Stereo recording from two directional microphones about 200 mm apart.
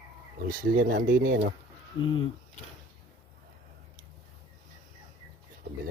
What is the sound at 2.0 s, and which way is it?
Speech, 25° left (ahead or behind).